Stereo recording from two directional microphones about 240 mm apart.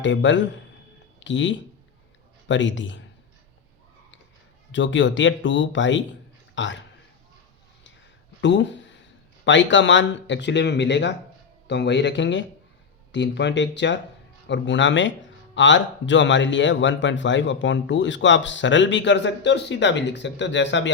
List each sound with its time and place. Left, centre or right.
0.0 s speech: left
4.7 s a man's voice: left
8.4 s speech: left